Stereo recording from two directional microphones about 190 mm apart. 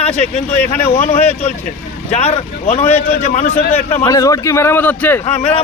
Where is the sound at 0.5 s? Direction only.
10° left (ahead or behind).